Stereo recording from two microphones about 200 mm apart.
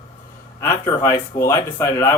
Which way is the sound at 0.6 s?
15° left (ahead or behind).